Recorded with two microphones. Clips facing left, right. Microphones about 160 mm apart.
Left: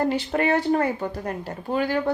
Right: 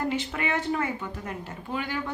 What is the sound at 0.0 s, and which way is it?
A woman's voice, 35° left (ahead or behind).